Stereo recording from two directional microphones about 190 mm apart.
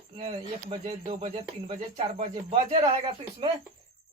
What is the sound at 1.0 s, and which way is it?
Speech, 30° right (ahead or behind).